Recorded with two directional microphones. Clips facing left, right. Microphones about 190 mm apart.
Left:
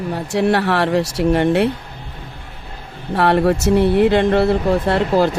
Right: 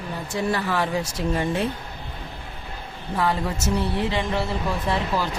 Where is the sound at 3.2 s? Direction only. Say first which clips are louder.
Left 10 dB; 70° left (ahead or behind).